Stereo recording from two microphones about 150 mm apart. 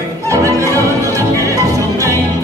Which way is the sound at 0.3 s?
20° right (ahead or behind).